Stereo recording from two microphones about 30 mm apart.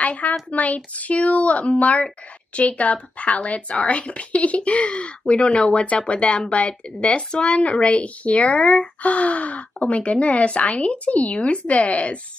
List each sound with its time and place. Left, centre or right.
0.0 s speech: left